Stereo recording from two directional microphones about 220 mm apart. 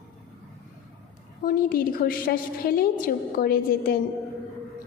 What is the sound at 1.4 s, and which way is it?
A woman's voice, 40° left (ahead or behind).